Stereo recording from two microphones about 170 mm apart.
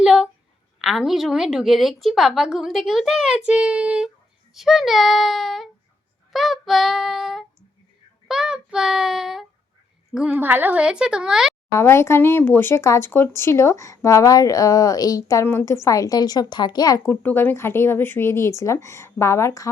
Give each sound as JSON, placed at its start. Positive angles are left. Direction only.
{"t": 0.0, "sound": "a sound", "side_deg": -5}
{"t": 0.8, "sound": "a woman's voice", "side_deg": 0}
{"t": 11.7, "sound": "speech", "side_deg": 15}